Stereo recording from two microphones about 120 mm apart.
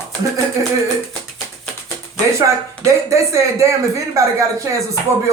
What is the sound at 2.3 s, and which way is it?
Speech, 25° right (ahead or behind).